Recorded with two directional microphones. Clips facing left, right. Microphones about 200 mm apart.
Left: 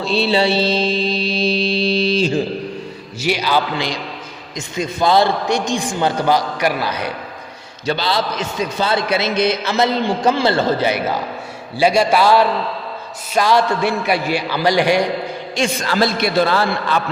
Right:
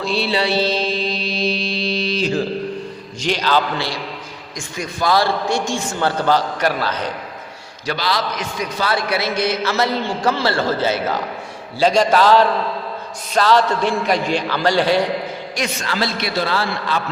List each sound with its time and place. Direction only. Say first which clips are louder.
0.0 s mantra: left 4 dB; 25° left (ahead or behind)
3.2 s a man's voice: left 1 dB; 10° left (ahead or behind)
7.9 s a man's voice: left 2 dB; 25° left (ahead or behind)
15.9 s a man's voice: left 6 dB; 50° left (ahead or behind)